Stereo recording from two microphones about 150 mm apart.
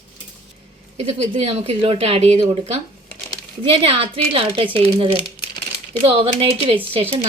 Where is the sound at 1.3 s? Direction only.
40° right (ahead or behind).